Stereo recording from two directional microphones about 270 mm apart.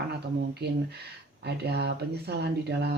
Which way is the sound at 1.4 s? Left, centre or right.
Right.